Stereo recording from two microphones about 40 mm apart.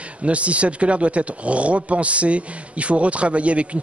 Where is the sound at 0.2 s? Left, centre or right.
Right.